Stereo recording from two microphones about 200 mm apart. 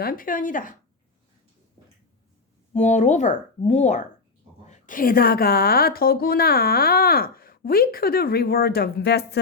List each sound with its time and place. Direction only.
0.0 s a woman's voice: 45° left (ahead or behind)
2.7 s a woman's voice: 35° left (ahead or behind); by 9.4 s 55° left (ahead or behind)